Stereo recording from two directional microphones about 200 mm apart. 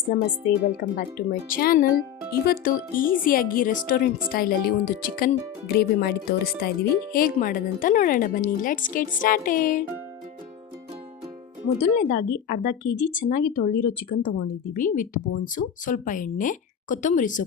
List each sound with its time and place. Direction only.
0.1 s speech: 55° left (ahead or behind)
11.8 s speech: 40° left (ahead or behind)